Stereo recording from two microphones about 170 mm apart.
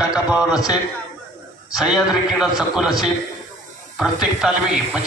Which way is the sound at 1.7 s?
5° right (ahead or behind).